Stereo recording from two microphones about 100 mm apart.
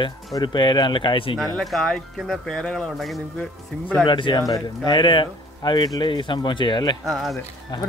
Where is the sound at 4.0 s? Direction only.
55° left (ahead or behind).